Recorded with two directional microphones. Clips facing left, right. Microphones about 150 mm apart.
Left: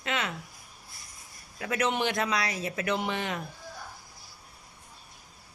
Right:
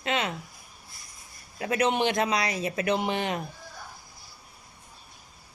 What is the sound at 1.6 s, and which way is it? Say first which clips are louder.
Speech: right 3 dB; 25° right (ahead or behind).